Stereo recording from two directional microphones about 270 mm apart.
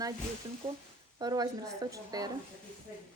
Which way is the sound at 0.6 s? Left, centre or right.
Centre.